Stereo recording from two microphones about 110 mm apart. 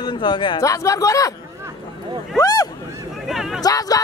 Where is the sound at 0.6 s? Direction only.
30° left (ahead or behind).